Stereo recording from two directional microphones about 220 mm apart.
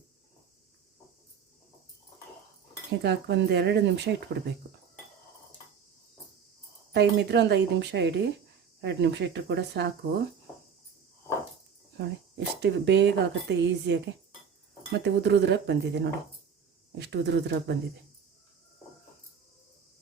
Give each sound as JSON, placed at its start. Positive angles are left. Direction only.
{"t": 3.0, "sound": "speech", "side_deg": -50}
{"t": 6.9, "sound": "speech", "side_deg": -50}
{"t": 11.9, "sound": "speech", "side_deg": -50}